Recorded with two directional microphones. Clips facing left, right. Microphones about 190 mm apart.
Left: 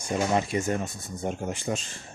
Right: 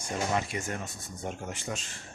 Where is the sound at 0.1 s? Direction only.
25° left (ahead or behind).